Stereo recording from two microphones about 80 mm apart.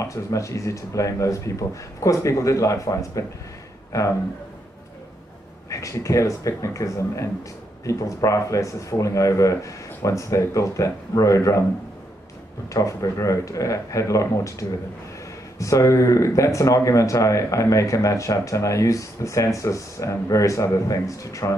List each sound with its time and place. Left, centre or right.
0.0 s speech: left
5.7 s speech: left
12.7 s speech: left